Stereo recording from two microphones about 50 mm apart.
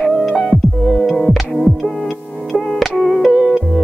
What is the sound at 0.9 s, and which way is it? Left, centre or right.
Music, centre.